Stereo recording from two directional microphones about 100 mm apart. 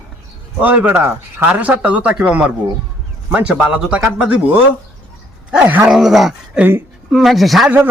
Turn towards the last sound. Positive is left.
turn(degrees=-20)  # may be behind; listen again after turning